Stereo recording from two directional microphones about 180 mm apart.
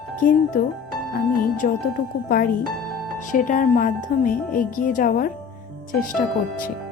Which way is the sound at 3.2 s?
45° left (ahead or behind).